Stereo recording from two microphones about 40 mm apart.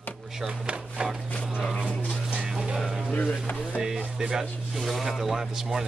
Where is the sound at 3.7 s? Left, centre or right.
Centre.